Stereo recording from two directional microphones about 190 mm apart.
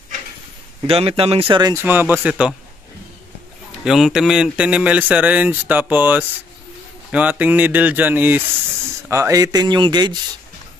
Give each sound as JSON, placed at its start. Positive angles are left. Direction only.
{"t": 0.8, "sound": "speech", "side_deg": -30}
{"t": 3.8, "sound": "speech", "side_deg": 0}